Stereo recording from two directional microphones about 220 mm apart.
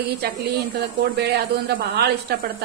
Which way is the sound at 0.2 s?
45° right (ahead or behind).